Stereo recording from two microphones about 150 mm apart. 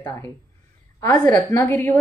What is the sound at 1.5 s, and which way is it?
Speech, 15° left (ahead or behind).